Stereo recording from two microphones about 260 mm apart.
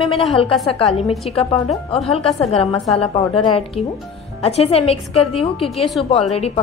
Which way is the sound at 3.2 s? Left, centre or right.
Left.